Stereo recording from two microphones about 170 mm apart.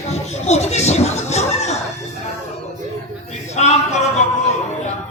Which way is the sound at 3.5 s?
40° left (ahead or behind).